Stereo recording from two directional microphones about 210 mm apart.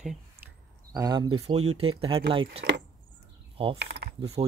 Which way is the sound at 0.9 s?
20° right (ahead or behind).